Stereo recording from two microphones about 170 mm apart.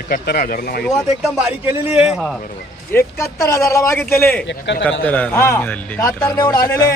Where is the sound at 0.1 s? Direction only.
55° left (ahead or behind).